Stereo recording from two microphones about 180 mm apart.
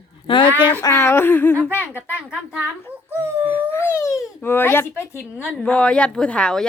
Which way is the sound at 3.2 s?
15° right (ahead or behind).